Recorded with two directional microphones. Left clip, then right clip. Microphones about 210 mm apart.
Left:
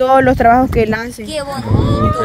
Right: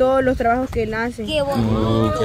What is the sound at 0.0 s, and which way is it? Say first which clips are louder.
Speech: left 7 dB; 40° left (ahead or behind).